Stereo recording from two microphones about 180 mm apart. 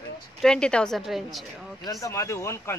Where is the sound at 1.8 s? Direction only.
20° left (ahead or behind).